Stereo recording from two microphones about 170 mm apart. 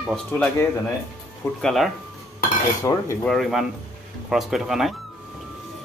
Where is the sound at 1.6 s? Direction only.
Centre (ahead or behind).